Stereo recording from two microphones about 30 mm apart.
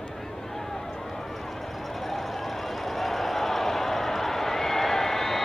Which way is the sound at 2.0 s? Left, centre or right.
Centre.